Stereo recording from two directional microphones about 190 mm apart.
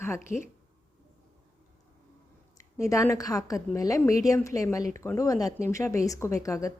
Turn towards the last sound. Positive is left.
turn(degrees=15)  # may be behind; listen again after turning